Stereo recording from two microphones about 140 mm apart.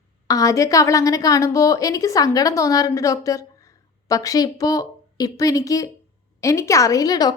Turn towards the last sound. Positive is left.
turn(degrees=30)  # may be behind; listen again after turning